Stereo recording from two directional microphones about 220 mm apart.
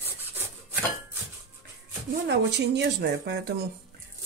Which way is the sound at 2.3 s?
50° right (ahead or behind).